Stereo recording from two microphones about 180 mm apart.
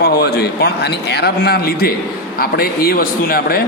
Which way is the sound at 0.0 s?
65° left (ahead or behind).